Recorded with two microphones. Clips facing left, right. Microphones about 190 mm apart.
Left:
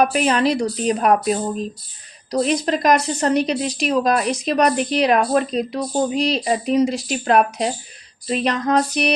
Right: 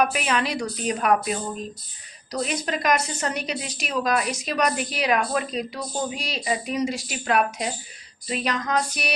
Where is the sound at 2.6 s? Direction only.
35° left (ahead or behind).